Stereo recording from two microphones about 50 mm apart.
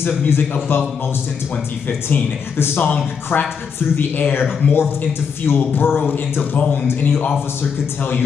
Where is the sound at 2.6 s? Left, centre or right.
Left.